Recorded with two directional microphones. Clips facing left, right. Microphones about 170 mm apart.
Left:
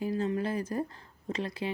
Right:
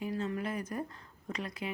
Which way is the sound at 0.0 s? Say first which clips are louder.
Left 5 dB; 35° left (ahead or behind).